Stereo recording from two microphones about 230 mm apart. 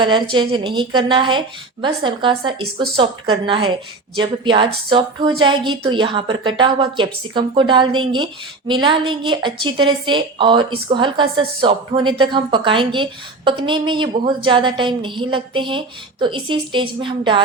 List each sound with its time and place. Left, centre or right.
0.0 s a woman's voice: right